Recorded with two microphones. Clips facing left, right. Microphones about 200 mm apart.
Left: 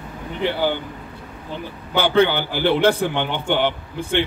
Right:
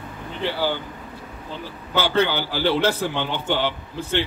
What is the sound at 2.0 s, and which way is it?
A man's voice, 55° left (ahead or behind).